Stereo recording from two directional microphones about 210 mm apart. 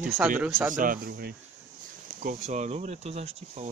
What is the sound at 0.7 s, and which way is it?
Speech, 40° right (ahead or behind).